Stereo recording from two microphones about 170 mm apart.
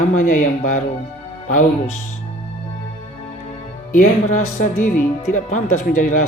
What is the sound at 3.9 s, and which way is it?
Speech, 50° left (ahead or behind).